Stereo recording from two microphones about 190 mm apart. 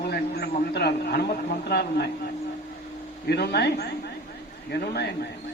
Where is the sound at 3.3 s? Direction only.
60° left (ahead or behind).